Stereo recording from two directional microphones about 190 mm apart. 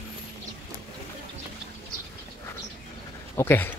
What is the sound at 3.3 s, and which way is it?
Dog, 10° left (ahead or behind).